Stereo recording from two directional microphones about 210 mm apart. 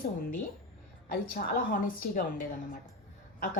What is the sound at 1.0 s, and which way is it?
A woman's voice, 45° left (ahead or behind).